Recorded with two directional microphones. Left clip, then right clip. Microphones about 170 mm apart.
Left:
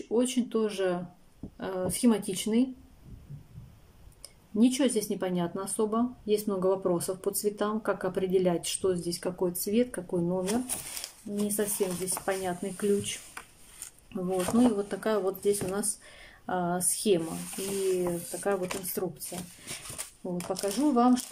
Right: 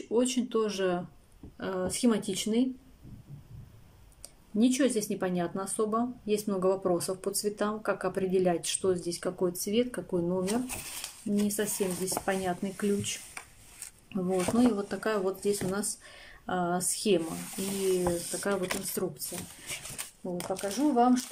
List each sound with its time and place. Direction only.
0.1 s a woman's voice: centre (ahead or behind)
4.6 s a woman's voice: 5° left (ahead or behind)
11.0 s a sound: 30° left (ahead or behind)
11.4 s a woman's voice: centre (ahead or behind)
18.4 s a woman's voice: 5° left (ahead or behind)
20.4 s a woman's voice: 5° left (ahead or behind)